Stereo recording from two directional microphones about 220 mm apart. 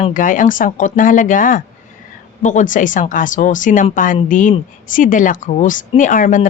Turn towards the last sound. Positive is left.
turn(degrees=35)  # may be behind; listen again after turning